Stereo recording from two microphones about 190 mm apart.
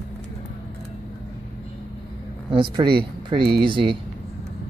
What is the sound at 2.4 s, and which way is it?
Speech, 25° right (ahead or behind).